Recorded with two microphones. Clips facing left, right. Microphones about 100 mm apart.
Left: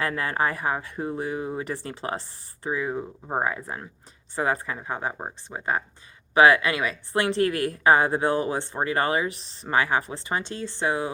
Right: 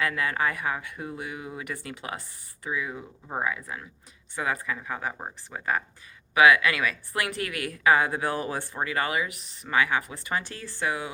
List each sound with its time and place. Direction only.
0.0 s a woman's voice: 35° left (ahead or behind)